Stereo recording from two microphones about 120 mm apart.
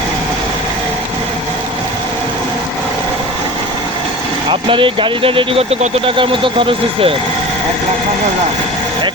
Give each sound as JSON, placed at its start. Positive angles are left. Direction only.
{"t": 4.7, "sound": "speech", "side_deg": -45}